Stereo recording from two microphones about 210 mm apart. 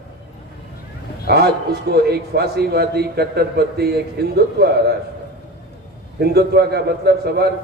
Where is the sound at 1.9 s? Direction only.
50° right (ahead or behind).